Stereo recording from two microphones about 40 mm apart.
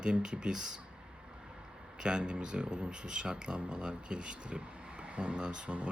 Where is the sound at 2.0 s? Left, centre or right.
Right.